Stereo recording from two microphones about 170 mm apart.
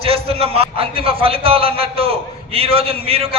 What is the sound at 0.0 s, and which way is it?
A man's voice, 35° right (ahead or behind).